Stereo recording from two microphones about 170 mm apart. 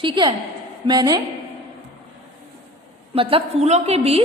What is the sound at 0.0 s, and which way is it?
A woman's voice, 30° right (ahead or behind).